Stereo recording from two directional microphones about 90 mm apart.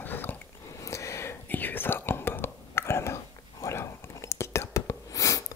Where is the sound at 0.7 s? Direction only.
35° left (ahead or behind).